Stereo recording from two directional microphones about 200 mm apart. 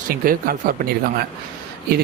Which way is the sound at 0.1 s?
45° right (ahead or behind).